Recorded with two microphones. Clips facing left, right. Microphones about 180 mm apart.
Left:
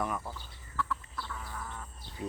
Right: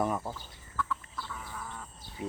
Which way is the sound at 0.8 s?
Centre (ahead or behind).